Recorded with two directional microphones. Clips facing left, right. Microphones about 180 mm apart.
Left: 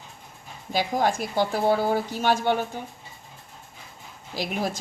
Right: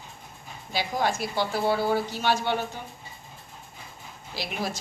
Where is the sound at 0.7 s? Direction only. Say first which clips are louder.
Left 3 dB; 45° left (ahead or behind).